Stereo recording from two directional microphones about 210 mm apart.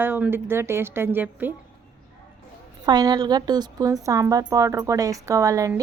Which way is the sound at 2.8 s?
20° right (ahead or behind).